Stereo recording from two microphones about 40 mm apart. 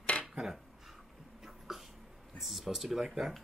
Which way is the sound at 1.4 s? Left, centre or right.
Centre.